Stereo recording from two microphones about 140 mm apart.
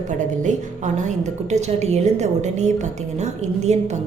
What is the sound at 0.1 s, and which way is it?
A woman's voice, 60° right (ahead or behind).